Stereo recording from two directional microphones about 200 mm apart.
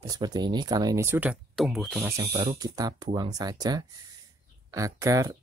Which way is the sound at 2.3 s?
25° right (ahead or behind).